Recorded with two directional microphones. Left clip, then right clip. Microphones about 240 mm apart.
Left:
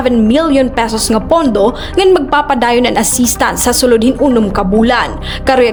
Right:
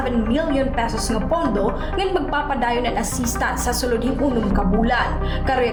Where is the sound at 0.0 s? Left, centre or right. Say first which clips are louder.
Left 11 dB; left.